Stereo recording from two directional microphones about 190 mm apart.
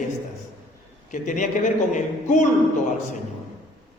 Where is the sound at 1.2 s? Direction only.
40° left (ahead or behind).